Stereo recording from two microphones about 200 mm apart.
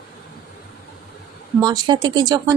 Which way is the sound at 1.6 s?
20° right (ahead or behind).